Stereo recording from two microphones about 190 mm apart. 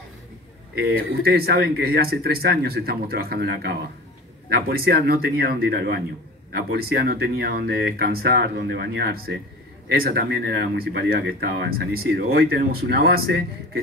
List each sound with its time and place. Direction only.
0.7 s speech: 55° right (ahead or behind)